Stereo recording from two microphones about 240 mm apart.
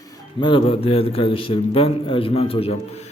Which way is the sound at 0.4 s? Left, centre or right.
Left.